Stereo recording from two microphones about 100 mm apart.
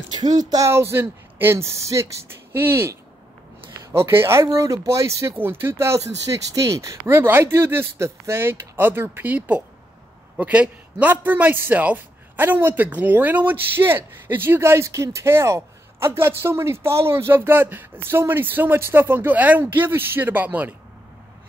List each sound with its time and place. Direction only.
0.1 s speech: 45° right (ahead or behind)
0.7 s a man's voice: 25° right (ahead or behind)